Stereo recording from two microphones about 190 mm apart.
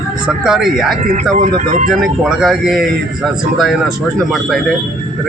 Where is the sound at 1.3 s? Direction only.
40° right (ahead or behind).